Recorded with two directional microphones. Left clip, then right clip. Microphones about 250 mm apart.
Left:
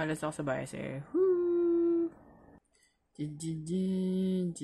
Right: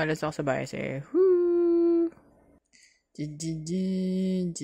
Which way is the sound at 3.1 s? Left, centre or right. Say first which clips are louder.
Right 4 dB; centre.